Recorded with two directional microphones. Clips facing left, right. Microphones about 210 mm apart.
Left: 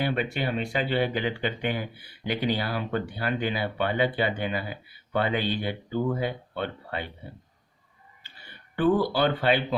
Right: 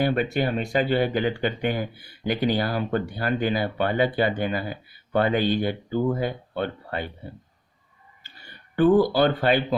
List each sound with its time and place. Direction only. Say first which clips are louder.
0.0 s speech: right 5 dB; 45° right (ahead or behind)
8.2 s a sound: right 2 dB; 45° right (ahead or behind)
9.1 s speech: right 3 dB; 45° right (ahead or behind)